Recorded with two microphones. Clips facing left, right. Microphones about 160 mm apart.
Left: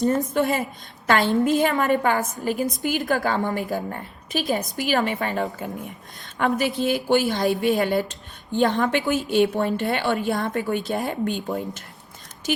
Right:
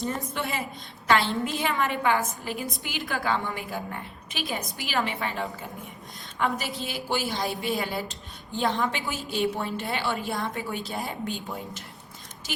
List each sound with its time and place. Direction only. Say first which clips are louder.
0.0 s a woman's voice: left 10 dB; 45° left (ahead or behind)